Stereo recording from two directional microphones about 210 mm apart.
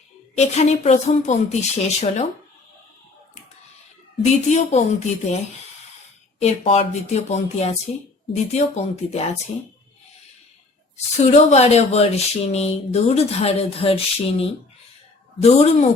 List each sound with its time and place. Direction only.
0.3 s speech: 30° left (ahead or behind)
4.2 s speech: 35° left (ahead or behind)
6.4 s speech: 30° left (ahead or behind)
11.2 s speech: 35° left (ahead or behind)